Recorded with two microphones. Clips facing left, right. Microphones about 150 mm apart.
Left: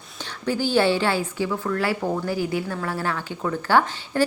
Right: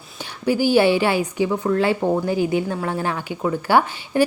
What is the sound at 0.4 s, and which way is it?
A woman's voice, 10° right (ahead or behind).